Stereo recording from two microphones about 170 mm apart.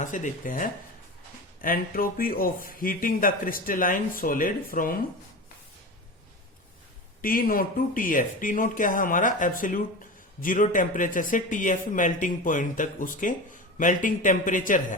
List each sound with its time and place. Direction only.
0.0 s speech: 50° left (ahead or behind)
7.2 s speech: 55° left (ahead or behind)